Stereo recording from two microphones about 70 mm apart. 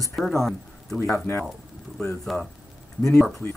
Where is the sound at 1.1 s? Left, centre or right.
Left.